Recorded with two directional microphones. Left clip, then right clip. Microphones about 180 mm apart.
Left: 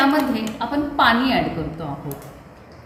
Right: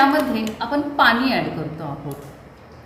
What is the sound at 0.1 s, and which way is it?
A woman's voice, 10° right (ahead or behind).